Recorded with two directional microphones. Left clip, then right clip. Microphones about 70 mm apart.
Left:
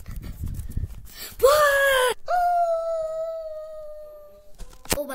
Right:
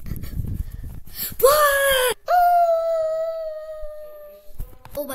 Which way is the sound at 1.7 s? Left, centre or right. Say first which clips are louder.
Right 1 dB; right.